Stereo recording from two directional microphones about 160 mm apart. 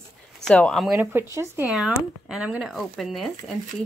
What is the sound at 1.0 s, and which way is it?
Speech, 15° right (ahead or behind).